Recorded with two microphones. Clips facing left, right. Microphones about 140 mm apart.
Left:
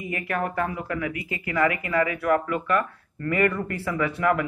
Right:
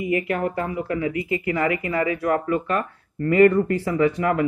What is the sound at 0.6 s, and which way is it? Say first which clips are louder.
Speech: right 3 dB; 25° right (ahead or behind).